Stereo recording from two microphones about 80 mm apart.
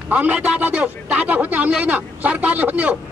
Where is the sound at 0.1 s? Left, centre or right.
Centre.